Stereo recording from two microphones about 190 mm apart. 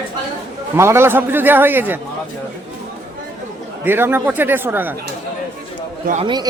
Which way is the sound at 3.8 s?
10° right (ahead or behind).